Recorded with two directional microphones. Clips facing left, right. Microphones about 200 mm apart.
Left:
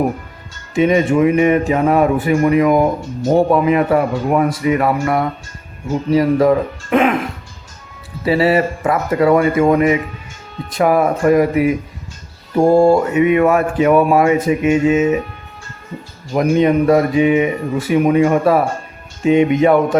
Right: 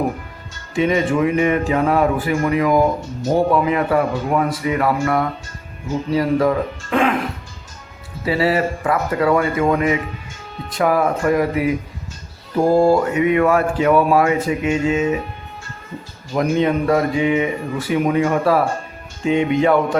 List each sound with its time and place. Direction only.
0.7 s speech: 20° left (ahead or behind)
8.2 s speech: 25° left (ahead or behind)
12.6 s speech: 25° left (ahead or behind)
16.3 s speech: 20° left (ahead or behind)